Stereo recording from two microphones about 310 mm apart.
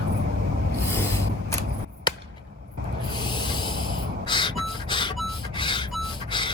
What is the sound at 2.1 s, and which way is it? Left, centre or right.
Chop, centre.